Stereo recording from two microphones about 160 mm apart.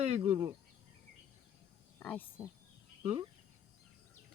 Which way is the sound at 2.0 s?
10° left (ahead or behind).